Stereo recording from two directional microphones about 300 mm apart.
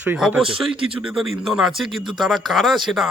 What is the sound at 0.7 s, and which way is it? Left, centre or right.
Speech, centre.